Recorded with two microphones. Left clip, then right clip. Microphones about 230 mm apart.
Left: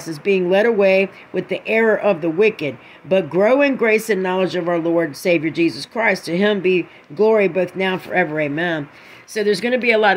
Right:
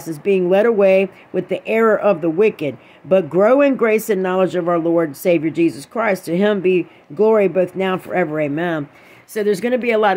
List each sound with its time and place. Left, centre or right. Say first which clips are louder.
0.2 s speech: right 1 dB; centre